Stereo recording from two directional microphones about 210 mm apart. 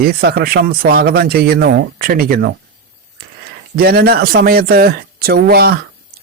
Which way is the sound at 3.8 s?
50° right (ahead or behind).